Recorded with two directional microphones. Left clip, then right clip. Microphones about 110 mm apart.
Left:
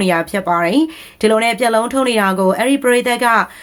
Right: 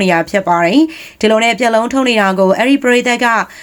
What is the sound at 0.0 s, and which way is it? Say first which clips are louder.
Speech: right 4 dB; 25° right (ahead or behind).